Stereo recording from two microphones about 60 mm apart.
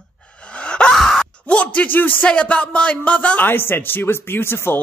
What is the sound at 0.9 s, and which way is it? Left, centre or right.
Groan, centre.